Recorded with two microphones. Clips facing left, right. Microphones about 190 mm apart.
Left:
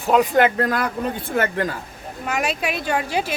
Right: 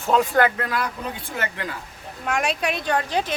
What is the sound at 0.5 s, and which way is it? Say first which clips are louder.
Speech: left 6 dB; 40° left (ahead or behind).